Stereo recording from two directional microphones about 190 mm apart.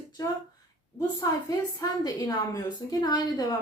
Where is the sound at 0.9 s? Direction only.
20° left (ahead or behind).